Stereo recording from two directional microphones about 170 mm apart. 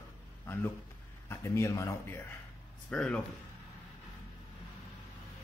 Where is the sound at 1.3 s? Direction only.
15° left (ahead or behind).